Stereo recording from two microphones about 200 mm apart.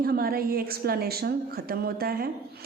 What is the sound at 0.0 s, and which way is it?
A woman's voice, 50° right (ahead or behind).